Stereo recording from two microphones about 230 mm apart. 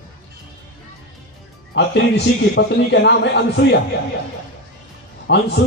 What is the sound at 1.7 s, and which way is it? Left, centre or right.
A man's voice, left.